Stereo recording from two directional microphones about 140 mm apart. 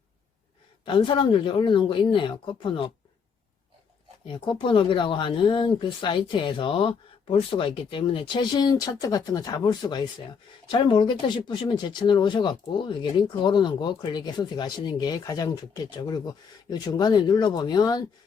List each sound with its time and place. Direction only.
0.9 s speech: 35° left (ahead or behind)
4.3 s speech: 35° left (ahead or behind)